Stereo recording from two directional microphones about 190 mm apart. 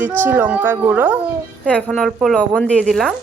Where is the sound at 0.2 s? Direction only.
10° right (ahead or behind).